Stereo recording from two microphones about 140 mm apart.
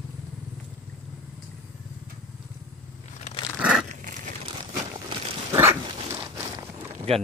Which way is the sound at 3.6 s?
5° right (ahead or behind).